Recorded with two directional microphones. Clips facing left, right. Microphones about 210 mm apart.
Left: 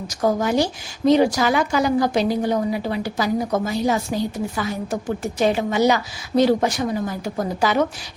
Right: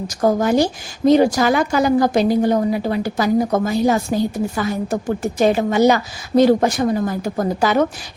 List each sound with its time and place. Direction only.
0.2 s a woman's voice: 45° right (ahead or behind)